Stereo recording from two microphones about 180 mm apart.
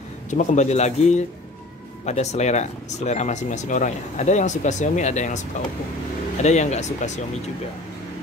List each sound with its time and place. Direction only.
0.3 s speech: 40° left (ahead or behind)
6.4 s speech: 40° left (ahead or behind)